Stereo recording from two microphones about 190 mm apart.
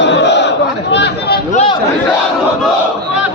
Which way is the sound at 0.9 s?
60° left (ahead or behind).